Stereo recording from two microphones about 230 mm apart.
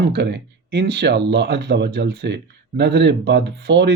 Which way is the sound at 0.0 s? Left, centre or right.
Right.